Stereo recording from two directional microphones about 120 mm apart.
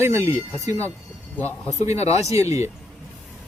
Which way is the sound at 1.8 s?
65° left (ahead or behind).